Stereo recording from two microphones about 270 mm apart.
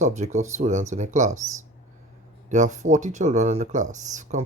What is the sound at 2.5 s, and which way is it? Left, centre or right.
Speech, right.